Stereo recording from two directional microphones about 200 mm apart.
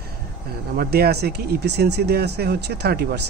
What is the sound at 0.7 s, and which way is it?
Speech, 50° right (ahead or behind).